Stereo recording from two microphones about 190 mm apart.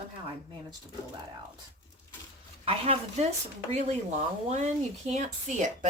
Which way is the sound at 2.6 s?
30° right (ahead or behind).